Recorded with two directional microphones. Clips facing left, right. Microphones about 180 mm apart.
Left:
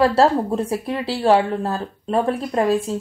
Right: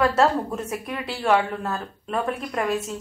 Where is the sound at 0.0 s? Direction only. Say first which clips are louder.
Left 4 dB; 30° left (ahead or behind).